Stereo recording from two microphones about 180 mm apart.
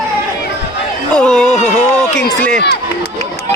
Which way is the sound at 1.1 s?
5° left (ahead or behind).